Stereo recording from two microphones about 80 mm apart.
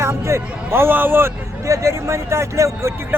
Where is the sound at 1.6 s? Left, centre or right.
Right.